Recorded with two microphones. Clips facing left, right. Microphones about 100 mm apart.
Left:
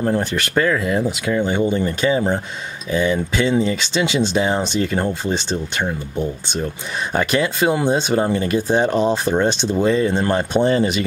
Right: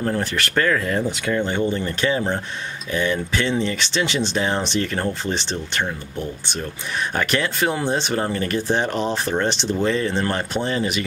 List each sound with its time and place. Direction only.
0.0 s speech: 20° left (ahead or behind)
10.7 s speech: 30° left (ahead or behind)